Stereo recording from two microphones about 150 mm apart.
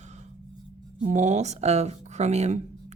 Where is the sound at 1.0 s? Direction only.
50° right (ahead or behind).